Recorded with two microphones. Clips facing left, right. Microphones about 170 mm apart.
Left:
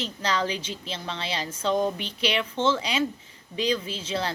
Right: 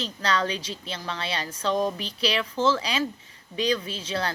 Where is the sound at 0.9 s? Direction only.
25° left (ahead or behind).